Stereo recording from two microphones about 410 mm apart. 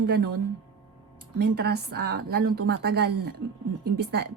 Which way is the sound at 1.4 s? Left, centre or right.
Right.